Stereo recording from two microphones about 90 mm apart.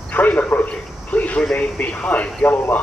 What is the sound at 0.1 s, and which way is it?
A man's voice, 15° left (ahead or behind).